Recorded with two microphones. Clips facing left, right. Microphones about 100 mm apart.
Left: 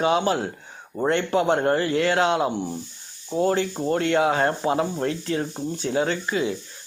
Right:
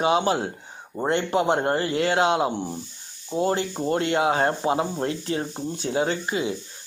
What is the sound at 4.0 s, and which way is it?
Speech, 20° right (ahead or behind).